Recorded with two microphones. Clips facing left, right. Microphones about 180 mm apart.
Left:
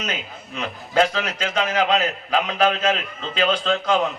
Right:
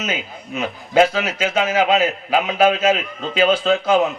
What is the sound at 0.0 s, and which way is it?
A man's voice, 5° right (ahead or behind).